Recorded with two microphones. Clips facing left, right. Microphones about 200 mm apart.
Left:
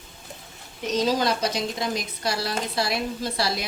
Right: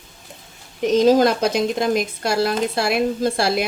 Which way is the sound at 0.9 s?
50° right (ahead or behind).